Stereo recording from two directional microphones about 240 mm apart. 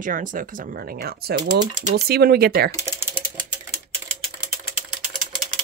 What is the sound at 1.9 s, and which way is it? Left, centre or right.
Speech, right.